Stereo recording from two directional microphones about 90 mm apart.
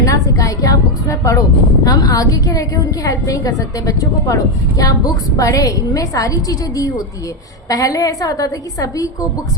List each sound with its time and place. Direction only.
0.0 s a woman's voice: 40° left (ahead or behind)